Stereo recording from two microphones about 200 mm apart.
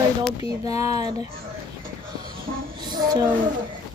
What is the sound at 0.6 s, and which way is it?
Speech, 15° right (ahead or behind).